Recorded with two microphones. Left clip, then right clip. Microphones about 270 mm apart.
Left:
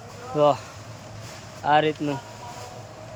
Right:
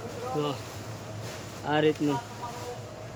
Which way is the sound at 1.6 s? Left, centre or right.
Centre.